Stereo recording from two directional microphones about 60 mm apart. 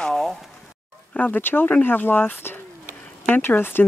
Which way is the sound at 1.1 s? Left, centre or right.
Left.